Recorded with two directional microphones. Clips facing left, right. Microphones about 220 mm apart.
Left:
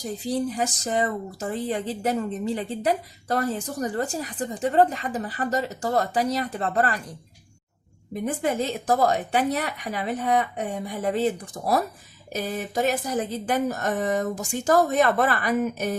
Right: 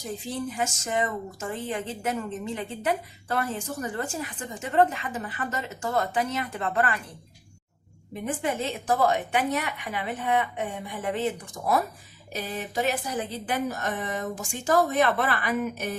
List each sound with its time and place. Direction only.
0.0 s a woman's voice: 35° left (ahead or behind)
8.1 s a woman's voice: 40° left (ahead or behind)